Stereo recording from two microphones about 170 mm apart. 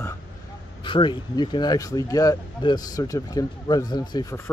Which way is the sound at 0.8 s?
30° left (ahead or behind).